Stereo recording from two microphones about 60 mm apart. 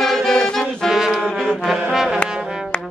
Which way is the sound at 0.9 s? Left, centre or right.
Centre.